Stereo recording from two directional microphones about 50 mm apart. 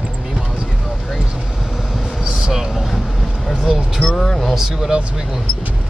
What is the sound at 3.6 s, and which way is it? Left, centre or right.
Speech, centre.